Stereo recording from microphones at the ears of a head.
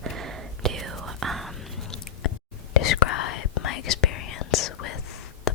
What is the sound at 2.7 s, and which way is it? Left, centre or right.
Whispering, left.